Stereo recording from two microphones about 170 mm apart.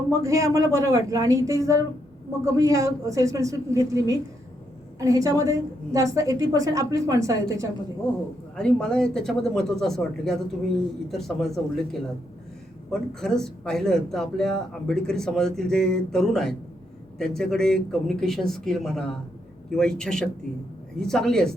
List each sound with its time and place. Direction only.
0.2 s a woman's voice: 20° right (ahead or behind)
8.5 s a man's voice: 5° left (ahead or behind)